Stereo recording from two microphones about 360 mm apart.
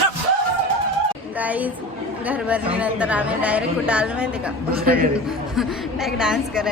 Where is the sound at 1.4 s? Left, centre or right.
Centre.